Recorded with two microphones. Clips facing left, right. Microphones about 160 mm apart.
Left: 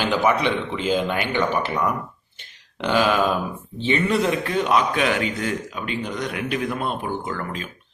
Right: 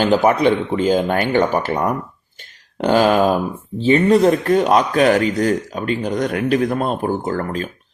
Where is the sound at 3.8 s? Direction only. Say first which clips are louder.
Right 8 dB; 40° right (ahead or behind).